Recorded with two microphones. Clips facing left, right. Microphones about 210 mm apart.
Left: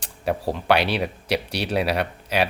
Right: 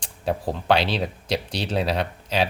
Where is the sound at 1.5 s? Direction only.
10° left (ahead or behind).